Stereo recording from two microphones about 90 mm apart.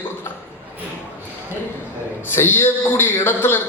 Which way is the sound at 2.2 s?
25° left (ahead or behind).